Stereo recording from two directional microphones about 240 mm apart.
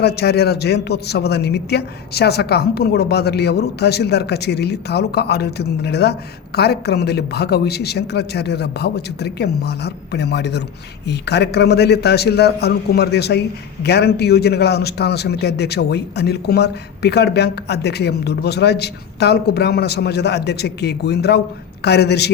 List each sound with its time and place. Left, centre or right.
0.0 s a man's voice: left